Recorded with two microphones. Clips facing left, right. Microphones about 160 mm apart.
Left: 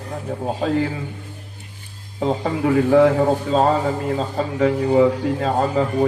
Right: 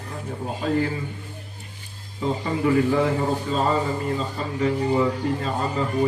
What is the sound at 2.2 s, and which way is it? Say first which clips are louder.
Speech: left 3 dB; 80° left.